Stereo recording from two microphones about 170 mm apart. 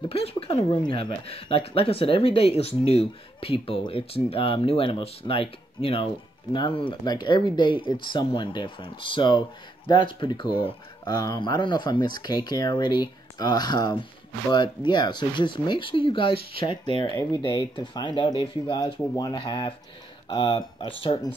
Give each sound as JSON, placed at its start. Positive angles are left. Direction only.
{"t": 0.1, "sound": "speech", "side_deg": 35}